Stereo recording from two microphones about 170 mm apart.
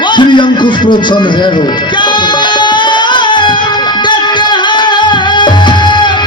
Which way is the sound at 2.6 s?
30° left (ahead or behind).